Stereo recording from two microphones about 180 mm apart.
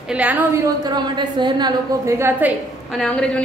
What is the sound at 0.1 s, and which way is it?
Speech, 10° right (ahead or behind).